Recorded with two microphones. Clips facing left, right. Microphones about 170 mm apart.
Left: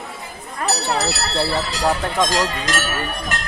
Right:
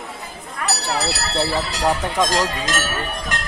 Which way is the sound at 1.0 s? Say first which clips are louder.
Left 1 dB; 5° right (ahead or behind).